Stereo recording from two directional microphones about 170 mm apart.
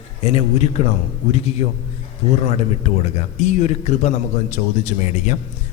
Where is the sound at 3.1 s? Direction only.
40° left (ahead or behind).